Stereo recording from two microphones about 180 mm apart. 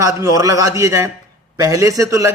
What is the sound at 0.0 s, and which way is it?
A man's voice, 20° right (ahead or behind).